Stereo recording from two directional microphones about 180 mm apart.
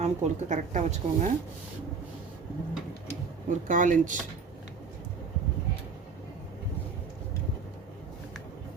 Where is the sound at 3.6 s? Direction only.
45° right (ahead or behind).